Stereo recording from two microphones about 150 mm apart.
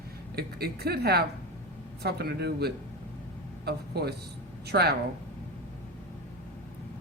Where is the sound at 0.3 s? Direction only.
90° right.